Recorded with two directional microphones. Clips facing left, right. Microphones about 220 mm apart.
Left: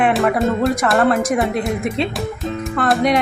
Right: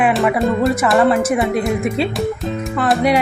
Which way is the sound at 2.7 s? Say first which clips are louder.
Right 1 dB; 5° right (ahead or behind).